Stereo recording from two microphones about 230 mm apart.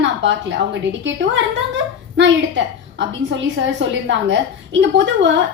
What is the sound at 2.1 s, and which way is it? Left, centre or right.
A woman's voice, right.